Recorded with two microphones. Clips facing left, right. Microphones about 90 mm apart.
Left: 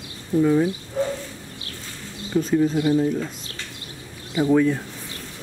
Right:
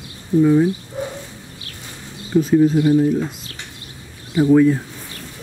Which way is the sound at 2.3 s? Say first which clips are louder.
Right 6 dB; 5° right (ahead or behind).